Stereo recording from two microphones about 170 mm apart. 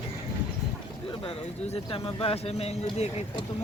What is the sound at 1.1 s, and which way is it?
Speech, 35° left (ahead or behind).